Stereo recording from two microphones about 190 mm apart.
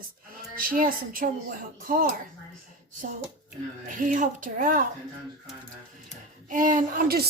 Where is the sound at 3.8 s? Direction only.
45° right (ahead or behind).